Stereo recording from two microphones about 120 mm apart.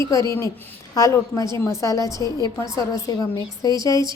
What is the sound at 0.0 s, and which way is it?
A woman's voice, 25° left (ahead or behind).